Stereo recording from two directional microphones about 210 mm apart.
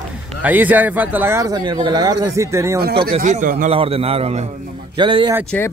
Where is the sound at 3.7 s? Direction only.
30° right (ahead or behind).